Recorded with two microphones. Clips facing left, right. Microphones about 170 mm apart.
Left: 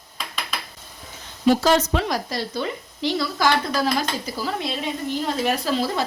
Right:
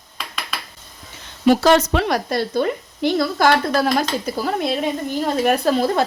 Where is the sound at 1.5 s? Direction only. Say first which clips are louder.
Right 4 dB; 70° right (ahead or behind); by 6.0 s 50° right (ahead or behind).